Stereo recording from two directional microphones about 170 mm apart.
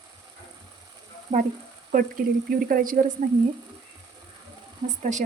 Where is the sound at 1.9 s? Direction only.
55° right (ahead or behind).